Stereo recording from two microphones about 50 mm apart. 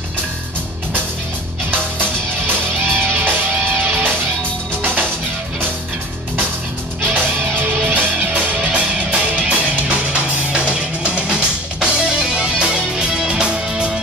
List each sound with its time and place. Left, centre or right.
2.0 s music: right
7.0 s music: right